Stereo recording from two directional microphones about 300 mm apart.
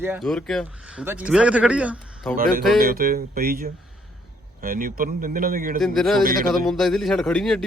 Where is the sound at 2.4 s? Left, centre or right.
Right.